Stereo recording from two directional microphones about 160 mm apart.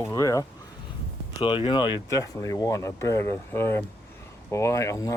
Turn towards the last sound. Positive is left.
turn(degrees=20)  # may be behind; listen again after turning